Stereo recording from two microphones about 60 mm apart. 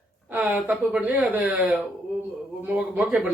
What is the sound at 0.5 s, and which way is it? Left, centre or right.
Speech, centre.